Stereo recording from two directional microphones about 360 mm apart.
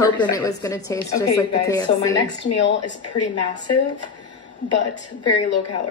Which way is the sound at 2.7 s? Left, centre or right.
Left.